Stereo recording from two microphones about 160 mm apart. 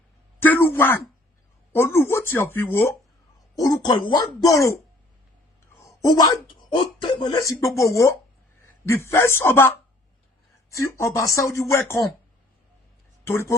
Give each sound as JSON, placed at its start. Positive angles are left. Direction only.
{"t": 0.4, "sound": "a sound", "side_deg": 10}
{"t": 1.7, "sound": "speech", "side_deg": 15}
{"t": 3.6, "sound": "a man's voice", "side_deg": 25}
{"t": 13.2, "sound": "speech", "side_deg": 15}